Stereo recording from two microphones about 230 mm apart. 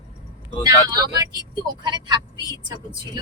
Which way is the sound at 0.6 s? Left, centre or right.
Centre.